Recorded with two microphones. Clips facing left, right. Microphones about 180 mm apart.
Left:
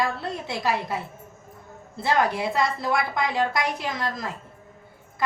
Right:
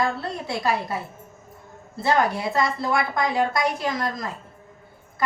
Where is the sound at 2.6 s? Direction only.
Centre (ahead or behind).